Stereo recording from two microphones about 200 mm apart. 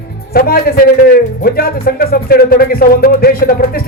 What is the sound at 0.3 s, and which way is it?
Speech, 50° left (ahead or behind).